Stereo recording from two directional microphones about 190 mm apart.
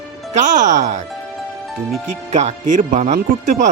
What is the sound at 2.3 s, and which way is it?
Speech, 35° right (ahead or behind).